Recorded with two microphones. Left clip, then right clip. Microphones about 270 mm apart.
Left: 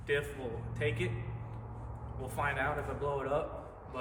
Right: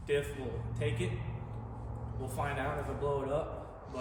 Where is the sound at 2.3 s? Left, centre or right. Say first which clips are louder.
Left 3 dB; centre.